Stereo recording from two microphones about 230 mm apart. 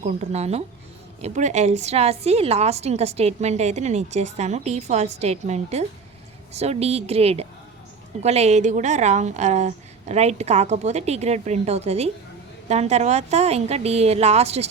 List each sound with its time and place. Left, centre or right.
0.0 s a woman's voice: right